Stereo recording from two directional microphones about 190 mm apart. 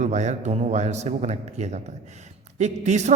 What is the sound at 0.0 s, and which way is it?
A man's voice, 35° right (ahead or behind).